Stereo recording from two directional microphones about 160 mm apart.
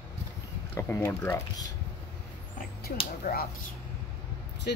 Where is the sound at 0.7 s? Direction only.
15° left (ahead or behind).